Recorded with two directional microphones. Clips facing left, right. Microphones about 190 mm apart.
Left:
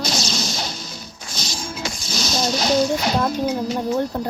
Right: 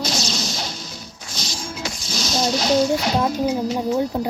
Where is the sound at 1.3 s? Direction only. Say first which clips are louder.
Left 1 dB; 45° left (ahead or behind).